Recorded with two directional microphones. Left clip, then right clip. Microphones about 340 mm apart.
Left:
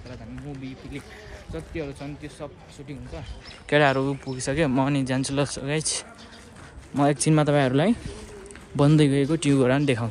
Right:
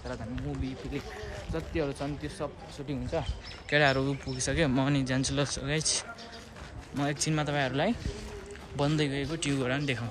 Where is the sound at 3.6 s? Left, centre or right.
Centre.